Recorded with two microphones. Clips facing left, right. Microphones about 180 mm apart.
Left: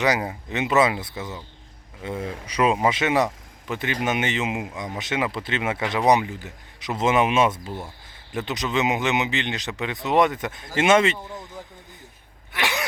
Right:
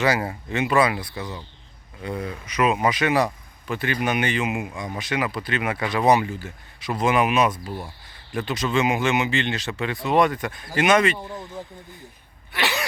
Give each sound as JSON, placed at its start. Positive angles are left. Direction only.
{"t": 0.0, "sound": "speech", "side_deg": 20}
{"t": 12.5, "sound": "sneeze", "side_deg": 15}